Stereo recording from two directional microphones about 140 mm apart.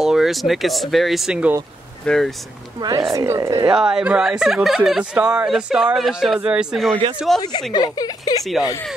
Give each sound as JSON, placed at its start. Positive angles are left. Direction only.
{"t": 0.0, "sound": "speech", "side_deg": -5}
{"t": 3.0, "sound": "speech", "side_deg": -20}
{"t": 3.7, "sound": "speech", "side_deg": -5}
{"t": 7.7, "sound": "speech", "side_deg": 30}